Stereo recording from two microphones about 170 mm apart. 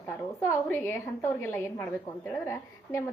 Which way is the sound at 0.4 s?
15° left (ahead or behind).